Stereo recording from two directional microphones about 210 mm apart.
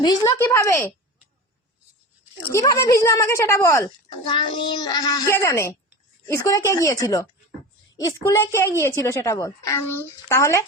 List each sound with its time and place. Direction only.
0.0 s speech: 15° left (ahead or behind)
2.5 s speech: 15° left (ahead or behind)